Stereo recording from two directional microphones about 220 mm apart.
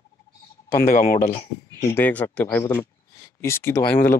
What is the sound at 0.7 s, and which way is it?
Speech, 40° left (ahead or behind).